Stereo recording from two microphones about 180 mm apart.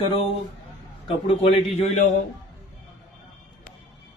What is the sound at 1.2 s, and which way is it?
Speech, 30° left (ahead or behind).